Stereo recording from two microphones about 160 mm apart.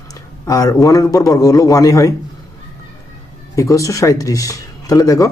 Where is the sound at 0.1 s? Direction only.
20° left (ahead or behind).